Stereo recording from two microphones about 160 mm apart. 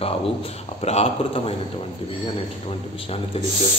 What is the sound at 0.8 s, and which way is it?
Speech, 40° left (ahead or behind).